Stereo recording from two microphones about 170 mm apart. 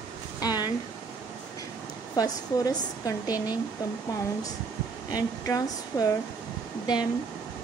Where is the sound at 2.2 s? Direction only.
20° left (ahead or behind).